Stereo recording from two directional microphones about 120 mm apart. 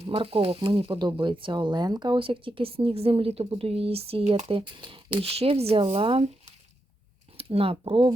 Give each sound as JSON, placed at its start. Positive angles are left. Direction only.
{"t": 0.0, "sound": "speech", "side_deg": -50}
{"t": 0.9, "sound": "speech", "side_deg": -40}
{"t": 7.3, "sound": "speech", "side_deg": -55}